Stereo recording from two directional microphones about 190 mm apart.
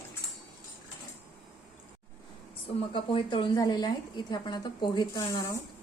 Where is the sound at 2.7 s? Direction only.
25° left (ahead or behind).